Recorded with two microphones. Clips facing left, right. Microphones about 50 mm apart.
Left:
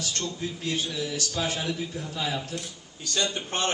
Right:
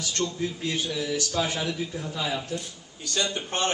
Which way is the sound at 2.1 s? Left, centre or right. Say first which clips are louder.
Right 1 dB; centre.